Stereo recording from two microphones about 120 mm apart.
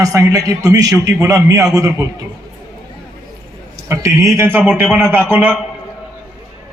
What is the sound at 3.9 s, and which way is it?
Speech, 25° right (ahead or behind).